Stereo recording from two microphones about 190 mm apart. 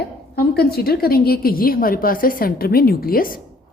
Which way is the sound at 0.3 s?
55° left (ahead or behind).